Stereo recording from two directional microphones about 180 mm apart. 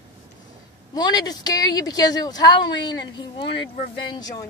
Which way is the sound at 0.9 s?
20° left (ahead or behind).